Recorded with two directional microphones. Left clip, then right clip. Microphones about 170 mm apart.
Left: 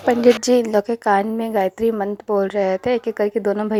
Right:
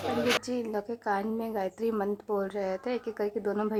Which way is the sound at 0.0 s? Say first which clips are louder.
Left 13 dB; centre (ahead or behind).